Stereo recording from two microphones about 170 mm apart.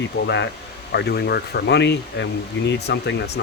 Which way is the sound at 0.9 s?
75° left (ahead or behind).